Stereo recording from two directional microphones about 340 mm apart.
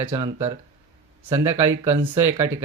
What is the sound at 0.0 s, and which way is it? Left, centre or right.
Speech, centre.